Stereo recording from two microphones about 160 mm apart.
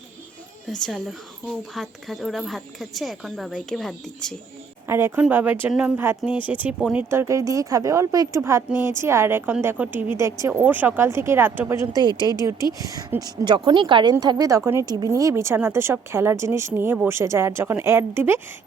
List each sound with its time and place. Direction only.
0.7 s speech: centre (ahead or behind)
4.9 s speech: 15° right (ahead or behind)
7.1 s speech: 15° right (ahead or behind)